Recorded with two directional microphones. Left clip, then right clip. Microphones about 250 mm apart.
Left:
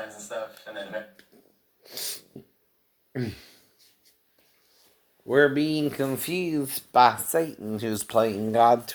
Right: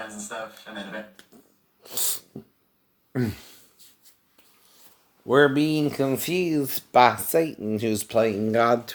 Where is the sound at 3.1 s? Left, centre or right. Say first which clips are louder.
Right 4 dB; right.